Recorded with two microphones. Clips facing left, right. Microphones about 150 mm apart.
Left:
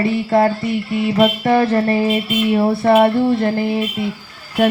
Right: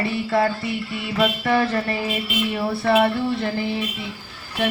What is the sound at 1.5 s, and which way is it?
Music, 45° left (ahead or behind).